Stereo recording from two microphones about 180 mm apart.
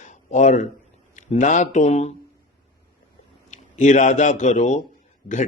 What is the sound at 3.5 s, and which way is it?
A man's voice, 40° left (ahead or behind).